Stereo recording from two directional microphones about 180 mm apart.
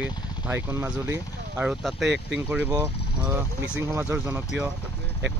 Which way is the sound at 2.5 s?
10° right (ahead or behind).